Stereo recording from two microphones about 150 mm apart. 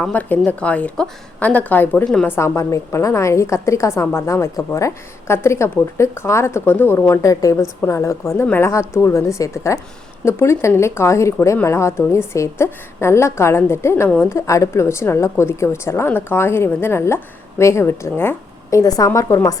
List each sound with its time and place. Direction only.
0.0 s speech: 10° left (ahead or behind)